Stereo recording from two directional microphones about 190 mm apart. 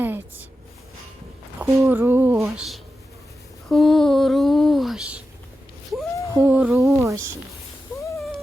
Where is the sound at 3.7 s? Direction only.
Centre (ahead or behind).